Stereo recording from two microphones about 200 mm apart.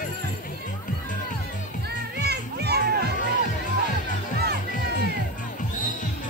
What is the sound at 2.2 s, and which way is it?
Music, 55° right (ahead or behind).